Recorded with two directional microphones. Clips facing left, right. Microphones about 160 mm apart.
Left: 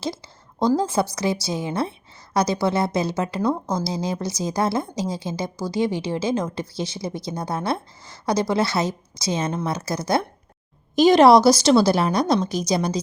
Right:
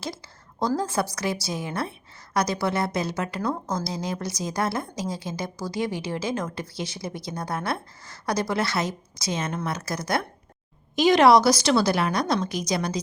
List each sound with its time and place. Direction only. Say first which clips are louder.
0.6 s a woman's voice: left 5 dB; 20° left (ahead or behind)